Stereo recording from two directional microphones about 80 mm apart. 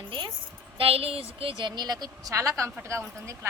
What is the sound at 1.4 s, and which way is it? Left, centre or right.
Speech, right.